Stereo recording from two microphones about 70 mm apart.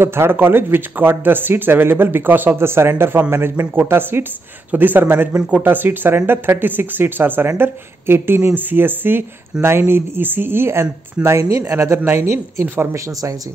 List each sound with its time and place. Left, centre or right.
0.0 s speech: right